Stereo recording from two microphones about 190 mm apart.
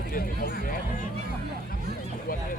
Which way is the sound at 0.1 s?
50° left (ahead or behind).